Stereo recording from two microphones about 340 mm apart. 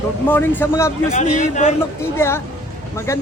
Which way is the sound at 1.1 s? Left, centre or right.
Left.